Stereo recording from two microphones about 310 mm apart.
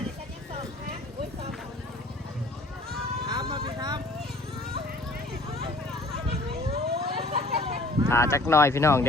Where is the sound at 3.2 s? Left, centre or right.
Centre.